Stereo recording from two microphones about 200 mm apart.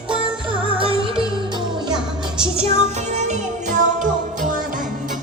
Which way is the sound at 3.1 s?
35° right (ahead or behind).